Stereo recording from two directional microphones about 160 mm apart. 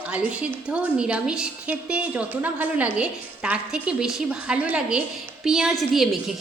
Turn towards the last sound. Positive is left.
turn(degrees=0)  # may be behind; listen again after turning